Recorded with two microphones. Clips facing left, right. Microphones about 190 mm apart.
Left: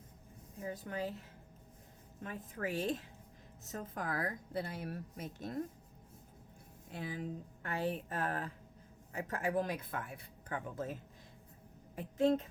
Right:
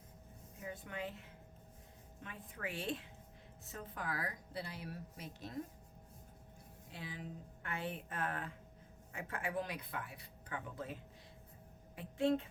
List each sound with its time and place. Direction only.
0.6 s a woman's voice: 40° left (ahead or behind)
2.2 s a woman's voice: 40° left (ahead or behind)
6.9 s a woman's voice: 45° left (ahead or behind)
11.9 s a woman's voice: 40° left (ahead or behind)